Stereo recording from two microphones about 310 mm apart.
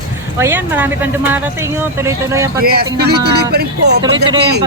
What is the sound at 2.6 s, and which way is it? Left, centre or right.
A man's voice, right.